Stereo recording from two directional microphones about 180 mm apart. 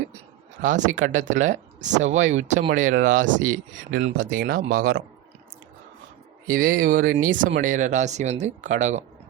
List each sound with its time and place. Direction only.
0.6 s speech: 45° right (ahead or behind)
6.5 s speech: 50° right (ahead or behind)